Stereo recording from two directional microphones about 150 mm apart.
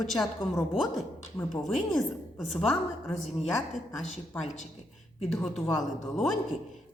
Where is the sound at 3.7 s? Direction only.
50° left (ahead or behind).